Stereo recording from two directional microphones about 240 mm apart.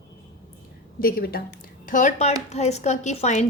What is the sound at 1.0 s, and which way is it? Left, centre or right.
A woman's voice, left.